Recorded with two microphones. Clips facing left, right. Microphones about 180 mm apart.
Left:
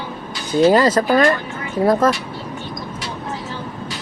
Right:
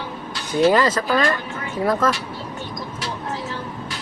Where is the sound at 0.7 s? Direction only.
40° left (ahead or behind).